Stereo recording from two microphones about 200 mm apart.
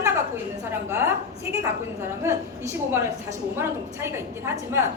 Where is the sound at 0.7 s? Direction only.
15° right (ahead or behind).